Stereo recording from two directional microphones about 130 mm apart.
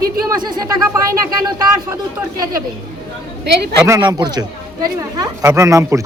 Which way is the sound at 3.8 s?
30° right (ahead or behind).